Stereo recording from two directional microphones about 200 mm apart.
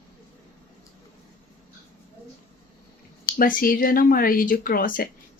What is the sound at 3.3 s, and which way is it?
Speech, 45° left (ahead or behind).